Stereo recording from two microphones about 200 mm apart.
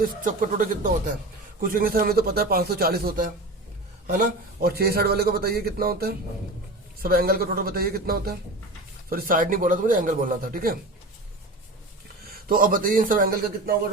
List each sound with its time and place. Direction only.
0.0 s speech: 40° right (ahead or behind)
4.6 s speech: 50° right (ahead or behind)
12.2 s speech: 45° right (ahead or behind)